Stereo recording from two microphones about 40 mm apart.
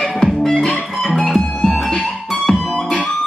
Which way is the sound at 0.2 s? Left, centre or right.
Centre.